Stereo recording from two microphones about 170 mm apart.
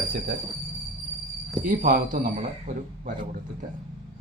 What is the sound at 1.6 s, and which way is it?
Speech, 50° right (ahead or behind).